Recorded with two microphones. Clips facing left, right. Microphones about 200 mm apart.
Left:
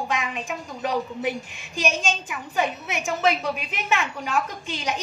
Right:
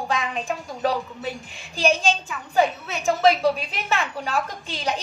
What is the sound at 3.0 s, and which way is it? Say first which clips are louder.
A woman's voice: right 6 dB; 35° right (ahead or behind).